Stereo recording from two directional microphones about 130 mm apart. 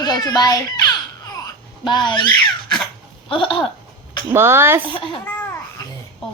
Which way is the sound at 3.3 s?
40° left (ahead or behind).